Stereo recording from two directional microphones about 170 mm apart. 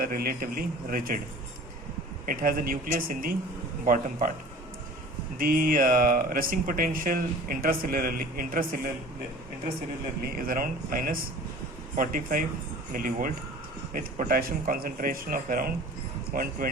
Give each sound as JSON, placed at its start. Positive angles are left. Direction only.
{"t": 0.0, "sound": "speech", "side_deg": -60}
{"t": 2.2, "sound": "speech", "side_deg": -55}
{"t": 5.4, "sound": "speech", "side_deg": -60}
{"t": 10.3, "sound": "speech", "side_deg": -55}